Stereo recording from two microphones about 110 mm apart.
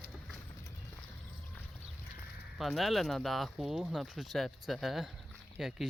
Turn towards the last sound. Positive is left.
turn(degrees=-5)  # may be behind; listen again after turning